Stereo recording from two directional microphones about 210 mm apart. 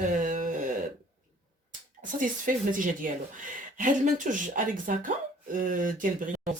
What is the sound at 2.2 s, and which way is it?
Speech, 40° right (ahead or behind).